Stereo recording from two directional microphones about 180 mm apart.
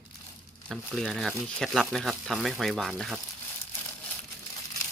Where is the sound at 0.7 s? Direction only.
Centre (ahead or behind).